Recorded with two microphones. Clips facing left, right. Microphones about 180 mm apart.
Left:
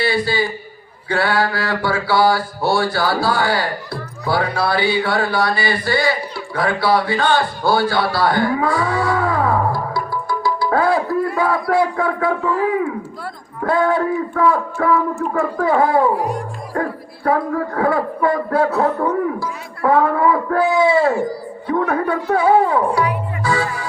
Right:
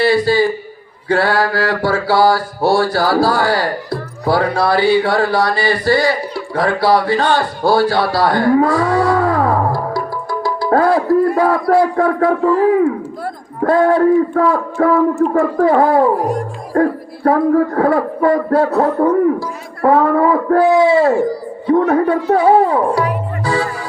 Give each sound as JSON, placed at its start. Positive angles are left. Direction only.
{"t": 0.0, "sound": "a sound", "side_deg": -40}
{"t": 1.0, "sound": "mantra", "side_deg": -40}
{"t": 21.8, "sound": "speech", "side_deg": -35}